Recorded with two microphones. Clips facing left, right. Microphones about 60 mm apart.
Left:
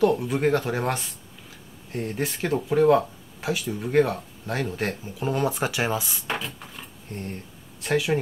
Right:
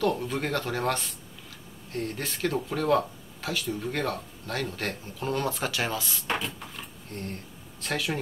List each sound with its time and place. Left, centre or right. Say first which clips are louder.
0.0 s speech: left 6 dB; centre